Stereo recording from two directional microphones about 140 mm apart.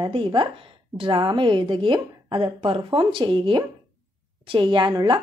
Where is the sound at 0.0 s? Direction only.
35° right (ahead or behind).